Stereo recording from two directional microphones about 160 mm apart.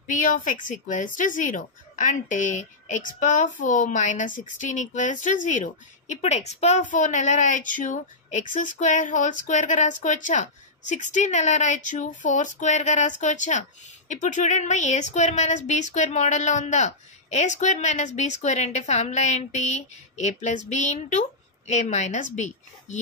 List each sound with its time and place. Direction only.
0.1 s a woman's voice: 55° left (ahead or behind)